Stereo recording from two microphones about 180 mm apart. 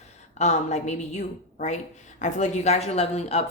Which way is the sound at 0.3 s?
40° left (ahead or behind).